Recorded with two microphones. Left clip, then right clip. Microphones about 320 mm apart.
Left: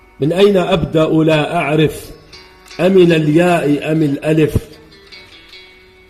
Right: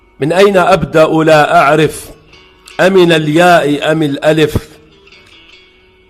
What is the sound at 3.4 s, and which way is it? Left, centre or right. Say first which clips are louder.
Speech: right 6 dB; right.